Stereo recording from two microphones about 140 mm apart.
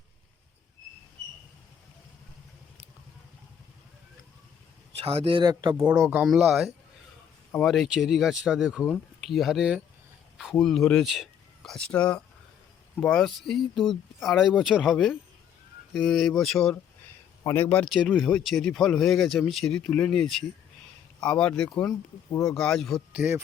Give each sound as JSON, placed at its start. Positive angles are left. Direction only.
{"t": 4.9, "sound": "speech", "side_deg": -45}
{"t": 5.4, "sound": "speech", "side_deg": -30}
{"t": 6.0, "sound": "speech", "side_deg": -10}
{"t": 17.4, "sound": "a man's voice", "side_deg": 15}
{"t": 17.8, "sound": "speech", "side_deg": 0}
{"t": 23.1, "sound": "speech", "side_deg": -10}